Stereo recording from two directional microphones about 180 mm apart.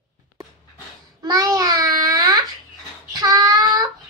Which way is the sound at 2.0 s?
20° right (ahead or behind).